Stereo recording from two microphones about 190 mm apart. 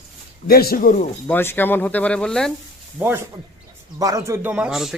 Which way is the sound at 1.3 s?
10° left (ahead or behind).